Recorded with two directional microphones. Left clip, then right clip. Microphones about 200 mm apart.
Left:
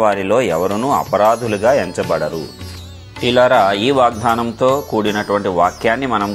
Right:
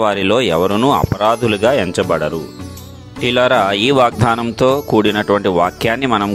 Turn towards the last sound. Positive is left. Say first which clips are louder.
# right 1 dB
turn(degrees=-55)  # may be behind; listen again after turning